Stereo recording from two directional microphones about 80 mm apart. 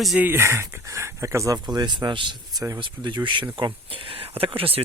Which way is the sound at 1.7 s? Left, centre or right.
Right.